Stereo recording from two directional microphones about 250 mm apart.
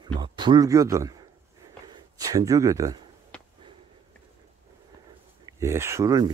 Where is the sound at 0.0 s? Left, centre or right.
Centre.